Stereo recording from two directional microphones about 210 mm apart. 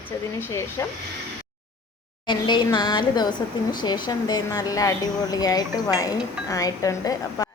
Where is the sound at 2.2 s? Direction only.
20° left (ahead or behind).